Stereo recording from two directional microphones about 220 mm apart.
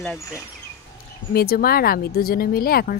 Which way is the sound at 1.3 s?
45° left (ahead or behind).